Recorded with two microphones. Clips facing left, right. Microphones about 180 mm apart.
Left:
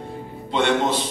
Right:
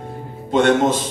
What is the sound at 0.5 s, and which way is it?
Speech, 45° right (ahead or behind).